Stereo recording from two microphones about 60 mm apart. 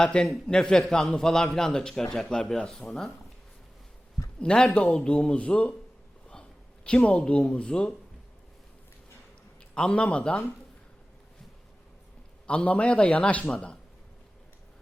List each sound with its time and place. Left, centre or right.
0.0 s a man's voice: centre
4.4 s a man's voice: centre
6.2 s a sound: centre
7.0 s a man's voice: centre
9.7 s a man's voice: centre
12.5 s a man's voice: left